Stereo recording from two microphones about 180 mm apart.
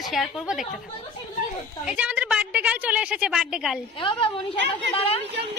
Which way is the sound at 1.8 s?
5° right (ahead or behind).